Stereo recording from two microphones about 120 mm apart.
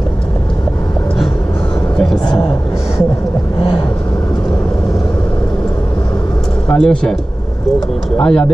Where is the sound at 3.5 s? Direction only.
50° left (ahead or behind).